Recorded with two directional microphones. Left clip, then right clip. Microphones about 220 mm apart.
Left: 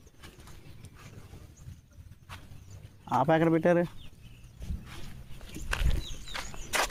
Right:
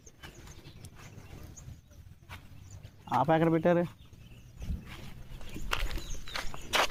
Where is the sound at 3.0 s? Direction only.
15° left (ahead or behind).